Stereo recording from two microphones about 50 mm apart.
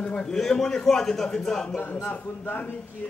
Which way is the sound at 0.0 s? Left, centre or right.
Left.